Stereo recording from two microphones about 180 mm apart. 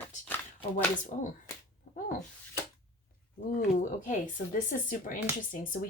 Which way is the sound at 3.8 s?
45° left (ahead or behind).